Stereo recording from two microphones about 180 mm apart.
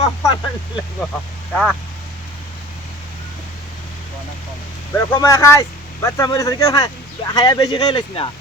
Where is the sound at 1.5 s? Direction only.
5° left (ahead or behind).